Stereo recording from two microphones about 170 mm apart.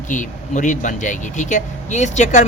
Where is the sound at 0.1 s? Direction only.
45° left (ahead or behind).